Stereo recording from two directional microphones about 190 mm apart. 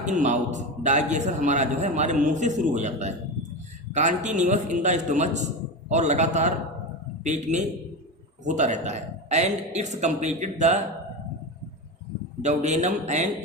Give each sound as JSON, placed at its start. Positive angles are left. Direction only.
{"t": 0.0, "sound": "a man's voice", "side_deg": -40}
{"t": 12.4, "sound": "a man's voice", "side_deg": -35}